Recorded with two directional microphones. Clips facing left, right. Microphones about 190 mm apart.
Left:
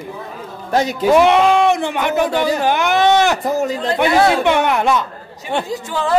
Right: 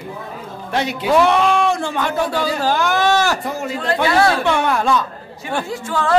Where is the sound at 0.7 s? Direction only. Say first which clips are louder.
Left 4 dB; 40° left (ahead or behind).